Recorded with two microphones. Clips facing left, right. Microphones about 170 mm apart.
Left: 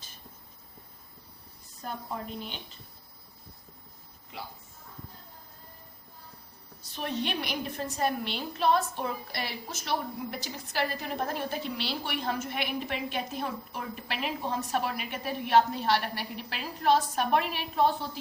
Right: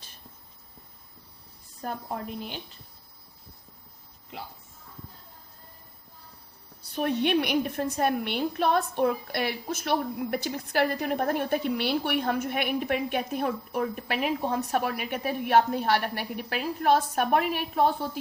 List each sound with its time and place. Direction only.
6.9 s a woman's voice: 55° right (ahead or behind)